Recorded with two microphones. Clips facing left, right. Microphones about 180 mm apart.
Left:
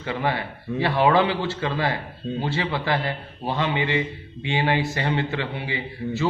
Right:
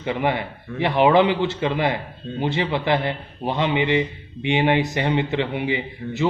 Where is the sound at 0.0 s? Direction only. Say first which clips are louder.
Right 3 dB; 20° right (ahead or behind).